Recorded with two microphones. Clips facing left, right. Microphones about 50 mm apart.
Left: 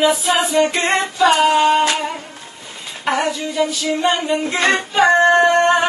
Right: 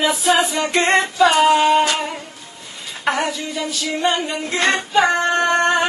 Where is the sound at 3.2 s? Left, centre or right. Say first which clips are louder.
Left 5 dB; centre.